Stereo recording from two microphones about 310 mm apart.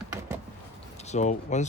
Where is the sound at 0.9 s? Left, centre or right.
Left.